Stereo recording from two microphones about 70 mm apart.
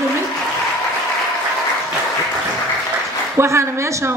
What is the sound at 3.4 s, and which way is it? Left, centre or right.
Speech, right.